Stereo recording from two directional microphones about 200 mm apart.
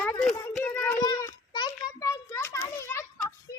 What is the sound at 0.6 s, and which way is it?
Child singing, 10° left (ahead or behind).